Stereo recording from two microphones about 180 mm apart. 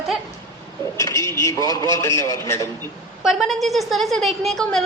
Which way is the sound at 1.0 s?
15° left (ahead or behind).